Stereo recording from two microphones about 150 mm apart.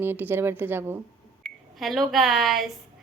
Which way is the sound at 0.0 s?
15° right (ahead or behind).